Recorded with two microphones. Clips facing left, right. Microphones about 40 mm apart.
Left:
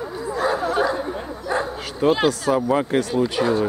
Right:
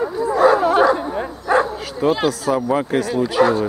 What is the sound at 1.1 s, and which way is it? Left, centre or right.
Bow-wow, right.